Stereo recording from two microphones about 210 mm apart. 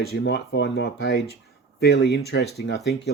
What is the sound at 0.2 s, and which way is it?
Speech, 55° left (ahead or behind).